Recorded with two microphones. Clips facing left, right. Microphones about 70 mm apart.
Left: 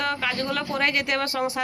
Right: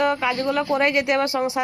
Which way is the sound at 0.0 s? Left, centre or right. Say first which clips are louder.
Right 6 dB; centre.